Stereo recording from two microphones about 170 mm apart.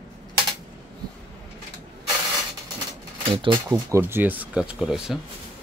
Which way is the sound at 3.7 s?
15° right (ahead or behind).